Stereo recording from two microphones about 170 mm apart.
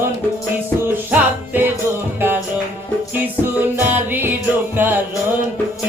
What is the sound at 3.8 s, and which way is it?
Music, 10° right (ahead or behind).